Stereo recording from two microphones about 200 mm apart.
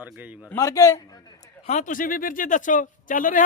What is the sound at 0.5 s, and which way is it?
Speech, 15° left (ahead or behind).